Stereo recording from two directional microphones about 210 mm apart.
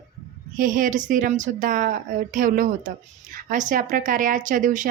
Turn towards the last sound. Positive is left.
turn(degrees=-40)  # may be behind; listen again after turning